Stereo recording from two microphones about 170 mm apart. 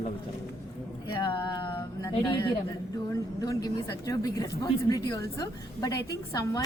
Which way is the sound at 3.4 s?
20° left (ahead or behind).